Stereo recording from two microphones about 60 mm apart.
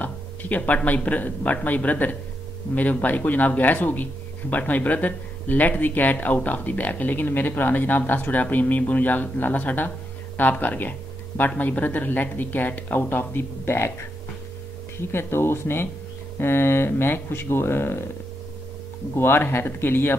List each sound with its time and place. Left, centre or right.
0.0 s speech: left
15.0 s speech: left
19.1 s speech: left